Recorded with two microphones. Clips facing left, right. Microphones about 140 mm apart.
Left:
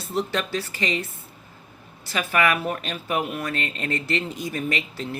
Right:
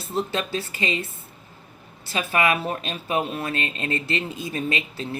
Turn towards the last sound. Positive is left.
turn(degrees=-20)  # may be behind; listen again after turning